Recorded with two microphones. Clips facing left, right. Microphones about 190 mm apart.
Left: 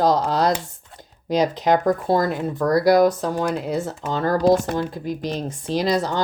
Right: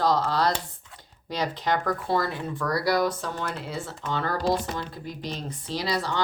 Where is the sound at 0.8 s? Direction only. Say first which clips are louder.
Left 10 dB; 45° left (ahead or behind).